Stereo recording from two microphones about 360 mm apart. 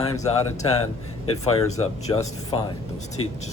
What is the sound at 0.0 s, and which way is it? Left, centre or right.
Speech, centre.